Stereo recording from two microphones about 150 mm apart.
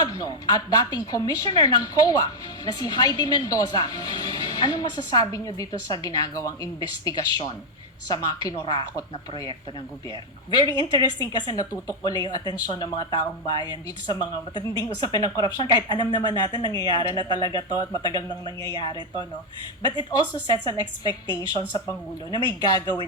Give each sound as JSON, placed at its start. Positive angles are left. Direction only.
{"t": 0.0, "sound": "speech", "side_deg": 25}
{"t": 10.5, "sound": "speech", "side_deg": 25}